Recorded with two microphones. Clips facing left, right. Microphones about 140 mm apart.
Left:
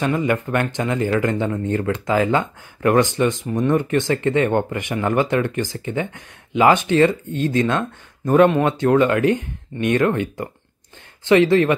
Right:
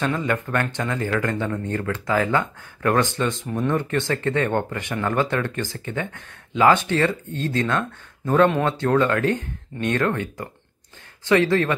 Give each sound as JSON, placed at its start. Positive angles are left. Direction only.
{"t": 0.0, "sound": "speech", "side_deg": 15}